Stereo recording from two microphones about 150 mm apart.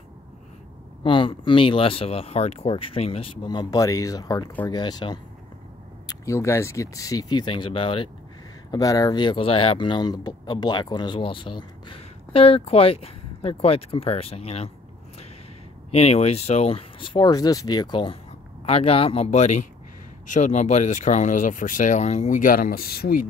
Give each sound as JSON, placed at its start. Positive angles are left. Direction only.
{"t": 1.0, "sound": "speech", "side_deg": 35}
{"t": 3.4, "sound": "speech", "side_deg": 25}
{"t": 8.7, "sound": "speech", "side_deg": 25}
{"t": 15.9, "sound": "speech", "side_deg": 45}
{"t": 18.7, "sound": "speech", "side_deg": 40}